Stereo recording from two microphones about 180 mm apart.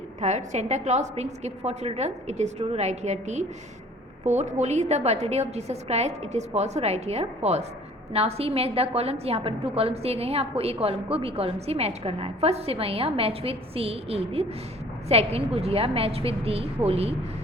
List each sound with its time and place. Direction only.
0.2 s a woman's voice: 40° right (ahead or behind)